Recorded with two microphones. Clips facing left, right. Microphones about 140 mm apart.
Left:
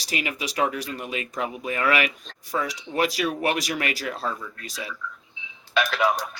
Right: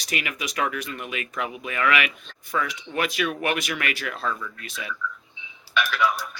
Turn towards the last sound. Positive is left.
turn(degrees=40)  # may be behind; listen again after turning